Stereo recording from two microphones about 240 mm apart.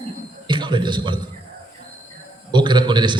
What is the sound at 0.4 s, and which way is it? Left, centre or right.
Speech, centre.